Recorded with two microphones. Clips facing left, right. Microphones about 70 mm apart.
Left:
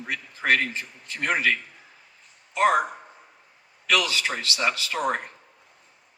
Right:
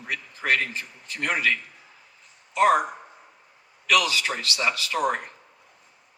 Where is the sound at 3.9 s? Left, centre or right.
Left.